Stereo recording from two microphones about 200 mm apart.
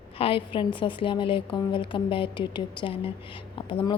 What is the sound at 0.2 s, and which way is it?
A woman's voice, 25° left (ahead or behind).